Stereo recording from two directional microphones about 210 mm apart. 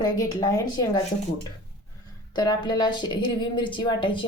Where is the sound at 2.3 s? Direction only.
20° left (ahead or behind).